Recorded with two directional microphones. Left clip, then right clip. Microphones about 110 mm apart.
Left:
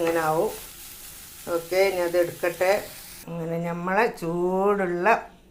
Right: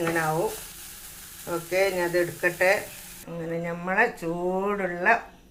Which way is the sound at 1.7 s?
25° left (ahead or behind).